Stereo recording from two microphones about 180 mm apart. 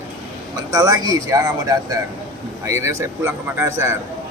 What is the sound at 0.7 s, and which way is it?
Speech, 20° right (ahead or behind).